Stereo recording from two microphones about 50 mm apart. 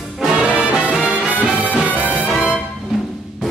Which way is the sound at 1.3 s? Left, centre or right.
Right.